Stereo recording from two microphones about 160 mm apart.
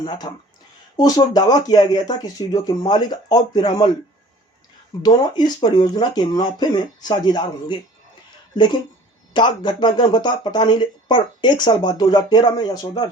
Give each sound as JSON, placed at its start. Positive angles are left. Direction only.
{"t": 0.0, "sound": "speech", "side_deg": 25}
{"t": 5.0, "sound": "speech", "side_deg": 25}